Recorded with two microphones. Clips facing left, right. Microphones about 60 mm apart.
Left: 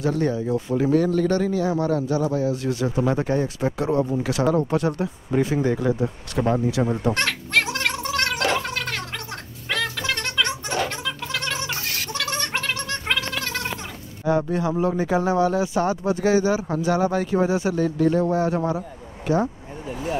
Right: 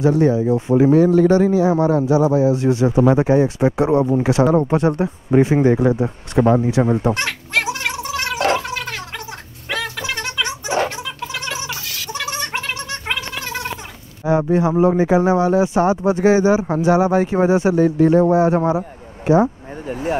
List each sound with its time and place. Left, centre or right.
0.0 s speech: right
7.2 s gargling: centre
9.7 s music: centre
12.1 s gargling: centre
14.2 s speech: centre
19.9 s speech: right